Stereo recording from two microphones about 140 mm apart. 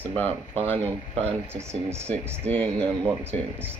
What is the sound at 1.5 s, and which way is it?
Speech, 20° right (ahead or behind).